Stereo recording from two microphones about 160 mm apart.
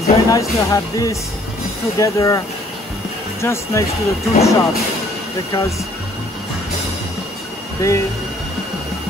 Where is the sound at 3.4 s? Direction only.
15° left (ahead or behind).